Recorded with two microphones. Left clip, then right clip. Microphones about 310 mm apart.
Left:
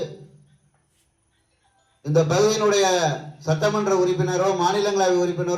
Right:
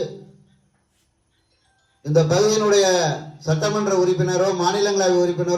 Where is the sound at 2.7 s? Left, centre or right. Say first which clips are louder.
Right 3 dB; left.